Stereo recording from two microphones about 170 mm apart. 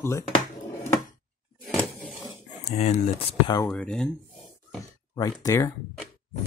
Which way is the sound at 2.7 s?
40° left (ahead or behind).